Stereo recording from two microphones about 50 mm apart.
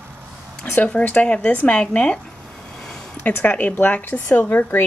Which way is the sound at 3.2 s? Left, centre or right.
Left.